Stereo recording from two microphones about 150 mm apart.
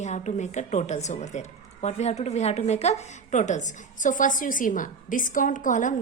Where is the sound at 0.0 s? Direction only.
50° left (ahead or behind).